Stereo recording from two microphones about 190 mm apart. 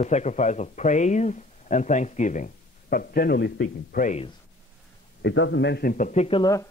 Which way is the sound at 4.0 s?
40° left (ahead or behind).